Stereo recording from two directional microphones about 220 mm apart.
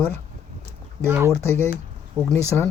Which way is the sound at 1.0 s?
10° right (ahead or behind).